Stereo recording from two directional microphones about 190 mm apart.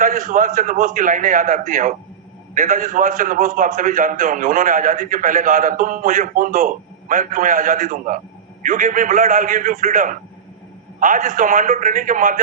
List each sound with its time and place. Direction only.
0.0 s a man's voice: 45° right (ahead or behind)